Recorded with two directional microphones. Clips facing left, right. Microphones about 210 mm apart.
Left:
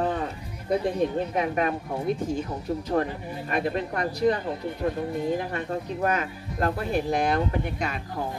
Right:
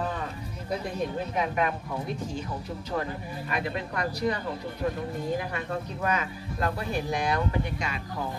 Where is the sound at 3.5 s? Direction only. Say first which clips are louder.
Left 5 dB; 40° left (ahead or behind).